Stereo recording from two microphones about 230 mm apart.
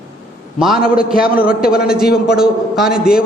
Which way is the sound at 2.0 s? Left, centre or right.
Left.